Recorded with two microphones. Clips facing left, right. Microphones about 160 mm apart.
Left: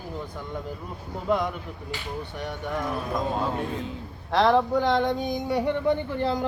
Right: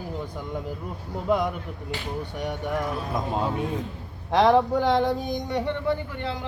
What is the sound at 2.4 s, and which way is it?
Speech, 15° right (ahead or behind).